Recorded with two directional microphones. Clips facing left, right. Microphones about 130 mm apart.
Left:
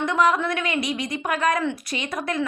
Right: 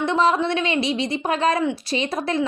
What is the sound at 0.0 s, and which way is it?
A woman's voice, 30° right (ahead or behind).